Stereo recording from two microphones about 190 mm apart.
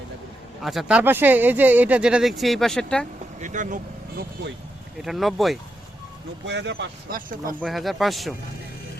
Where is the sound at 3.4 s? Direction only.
40° right (ahead or behind).